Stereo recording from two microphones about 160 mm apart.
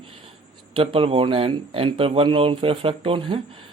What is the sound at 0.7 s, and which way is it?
Speech, 35° right (ahead or behind).